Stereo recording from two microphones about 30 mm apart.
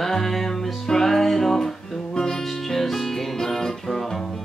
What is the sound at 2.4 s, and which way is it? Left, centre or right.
Music, centre.